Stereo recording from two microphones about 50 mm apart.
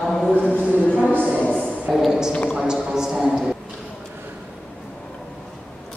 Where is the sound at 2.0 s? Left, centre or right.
Centre.